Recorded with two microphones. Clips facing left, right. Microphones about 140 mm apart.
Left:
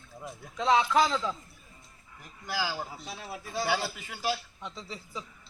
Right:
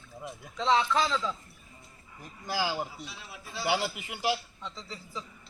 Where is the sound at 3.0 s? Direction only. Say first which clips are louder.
Left 5 dB; 45° left (ahead or behind).